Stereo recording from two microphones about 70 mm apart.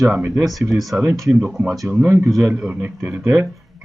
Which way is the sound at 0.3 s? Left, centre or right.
Centre.